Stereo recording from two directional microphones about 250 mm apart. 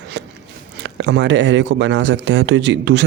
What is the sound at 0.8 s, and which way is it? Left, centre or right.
Speech, right.